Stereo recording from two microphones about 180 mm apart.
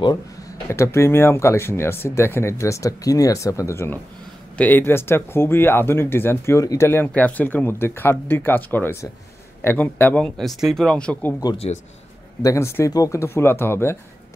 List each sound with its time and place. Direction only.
0.7 s speech: 15° left (ahead or behind)
11.5 s a man's voice: 35° left (ahead or behind)
12.4 s speech: 15° left (ahead or behind)